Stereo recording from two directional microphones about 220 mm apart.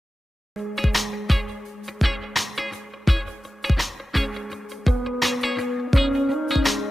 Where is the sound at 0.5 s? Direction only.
Centre (ahead or behind).